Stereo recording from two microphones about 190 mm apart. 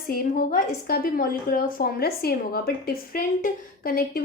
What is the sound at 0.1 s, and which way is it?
A woman's voice, 50° left (ahead or behind).